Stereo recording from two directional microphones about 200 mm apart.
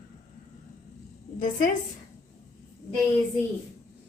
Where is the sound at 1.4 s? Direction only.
45° left (ahead or behind).